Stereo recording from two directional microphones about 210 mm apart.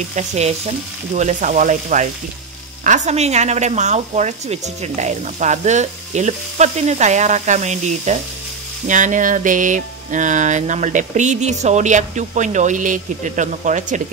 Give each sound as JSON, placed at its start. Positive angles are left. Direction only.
{"t": 0.1, "sound": "speech", "side_deg": -35}